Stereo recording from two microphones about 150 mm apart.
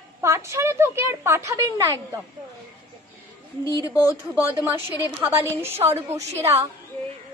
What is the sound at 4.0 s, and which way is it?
Speech, 15° right (ahead or behind).